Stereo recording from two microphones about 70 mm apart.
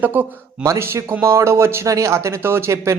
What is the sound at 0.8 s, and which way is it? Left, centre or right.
Speech, right.